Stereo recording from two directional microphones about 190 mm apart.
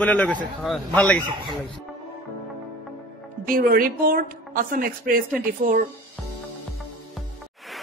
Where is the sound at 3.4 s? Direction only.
50° right (ahead or behind).